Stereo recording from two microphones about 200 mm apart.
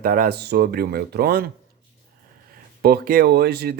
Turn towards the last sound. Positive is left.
turn(degrees=-50)  # may be behind; listen again after turning